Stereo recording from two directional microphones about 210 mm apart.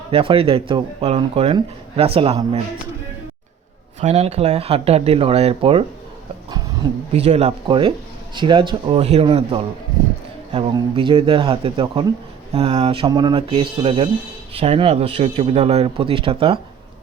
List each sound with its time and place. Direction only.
0.1 s speech: 25° right (ahead or behind)
4.0 s speech: 30° right (ahead or behind)
7.1 s speech: 30° right (ahead or behind)